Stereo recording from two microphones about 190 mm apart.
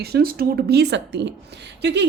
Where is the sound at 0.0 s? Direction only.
55° right (ahead or behind).